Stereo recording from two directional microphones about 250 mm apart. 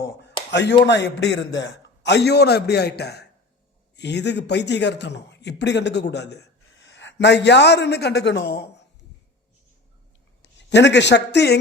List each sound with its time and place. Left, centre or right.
0.0 s a sound: left
0.5 s a man's voice: left
10.4 s speech: left